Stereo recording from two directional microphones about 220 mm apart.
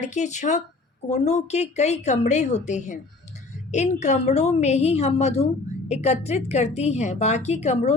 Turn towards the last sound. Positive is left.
turn(degrees=30)  # may be behind; listen again after turning